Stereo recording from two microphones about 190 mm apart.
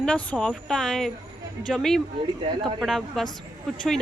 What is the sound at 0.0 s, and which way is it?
Speech, 5° left (ahead or behind).